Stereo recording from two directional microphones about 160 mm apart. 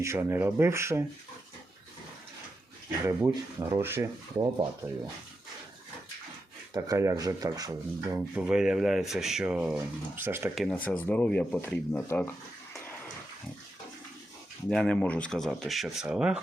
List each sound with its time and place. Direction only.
0.0 s speech: 15° right (ahead or behind)
3.1 s speech: 15° right (ahead or behind)
6.7 s speech: 20° right (ahead or behind)
10.5 s speech: centre (ahead or behind)
14.7 s speech: 5° left (ahead or behind)